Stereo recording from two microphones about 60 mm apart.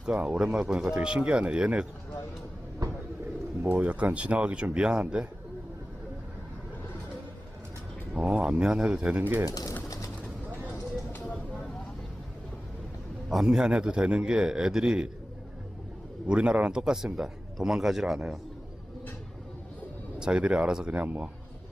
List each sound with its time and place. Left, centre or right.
0.0 s a man's voice: centre
2.8 s bird: right
3.8 s speech: right
8.1 s a man's voice: centre
9.5 s speech: left
10.7 s a sound: left
13.2 s a man's voice: centre
16.2 s a man's voice: centre
20.1 s a man's voice: centre